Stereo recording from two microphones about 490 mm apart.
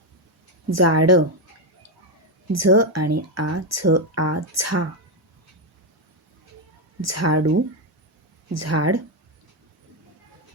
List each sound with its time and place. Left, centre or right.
0.7 s speech: right
2.5 s speech: right
7.0 s speech: right
8.5 s speech: right